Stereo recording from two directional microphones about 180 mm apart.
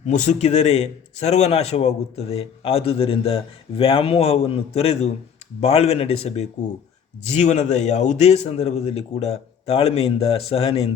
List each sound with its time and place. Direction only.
0.0 s a man's voice: 40° left (ahead or behind)